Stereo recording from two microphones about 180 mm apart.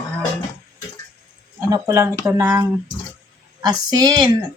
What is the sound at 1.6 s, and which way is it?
Speech, 20° right (ahead or behind).